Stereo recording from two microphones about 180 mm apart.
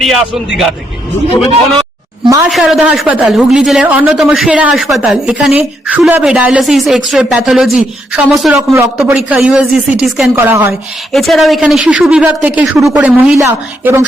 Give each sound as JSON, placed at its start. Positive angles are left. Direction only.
{"t": 0.0, "sound": "a woman's voice", "side_deg": 0}
{"t": 2.2, "sound": "a woman's voice", "side_deg": -20}
{"t": 2.5, "sound": "a woman's voice", "side_deg": 0}
{"t": 11.1, "sound": "a woman's voice", "side_deg": 0}